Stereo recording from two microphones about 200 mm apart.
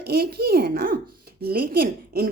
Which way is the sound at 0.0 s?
50° right (ahead or behind).